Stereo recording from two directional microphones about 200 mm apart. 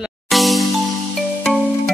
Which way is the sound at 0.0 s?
Centre (ahead or behind).